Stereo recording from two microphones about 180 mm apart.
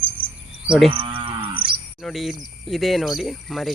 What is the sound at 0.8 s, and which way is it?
Moo, 30° right (ahead or behind).